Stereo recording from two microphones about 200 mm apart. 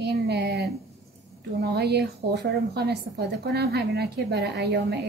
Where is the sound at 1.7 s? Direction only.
55° right (ahead or behind).